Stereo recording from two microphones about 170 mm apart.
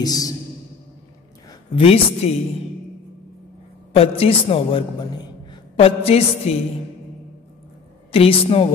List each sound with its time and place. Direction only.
0.0 s speech: 20° left (ahead or behind)
1.8 s a woman's voice: 35° left (ahead or behind)
3.9 s a man's voice: 35° left (ahead or behind)
8.1 s a woman's voice: 35° left (ahead or behind)